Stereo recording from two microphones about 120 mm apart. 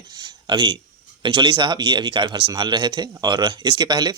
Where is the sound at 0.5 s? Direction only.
45° right (ahead or behind).